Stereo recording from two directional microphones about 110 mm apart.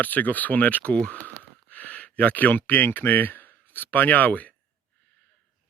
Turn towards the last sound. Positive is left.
turn(degrees=15)  # may be behind; listen again after turning